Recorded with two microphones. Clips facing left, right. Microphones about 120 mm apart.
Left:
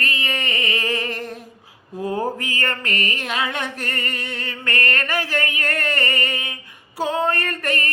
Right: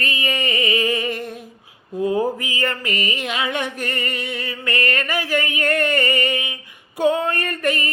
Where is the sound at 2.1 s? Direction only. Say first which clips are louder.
Right 3 dB; 15° right (ahead or behind).